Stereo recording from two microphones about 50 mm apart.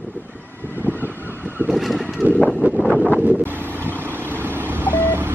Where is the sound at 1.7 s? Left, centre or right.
Centre.